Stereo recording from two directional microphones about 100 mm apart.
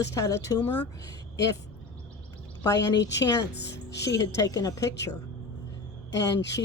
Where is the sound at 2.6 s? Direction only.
40° left (ahead or behind).